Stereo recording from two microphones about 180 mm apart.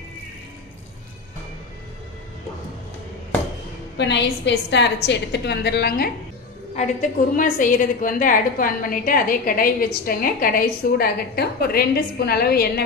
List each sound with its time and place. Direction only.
4.0 s a woman's voice: 75° left (ahead or behind)
6.7 s a woman's voice: 40° left (ahead or behind); by 12.8 s 60° left (ahead or behind)